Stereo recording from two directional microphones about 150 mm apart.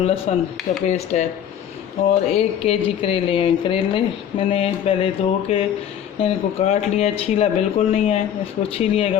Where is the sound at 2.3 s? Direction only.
40° left (ahead or behind).